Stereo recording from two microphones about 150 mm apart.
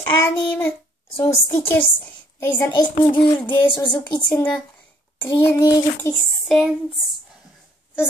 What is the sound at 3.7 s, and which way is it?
Speech, 30° left (ahead or behind).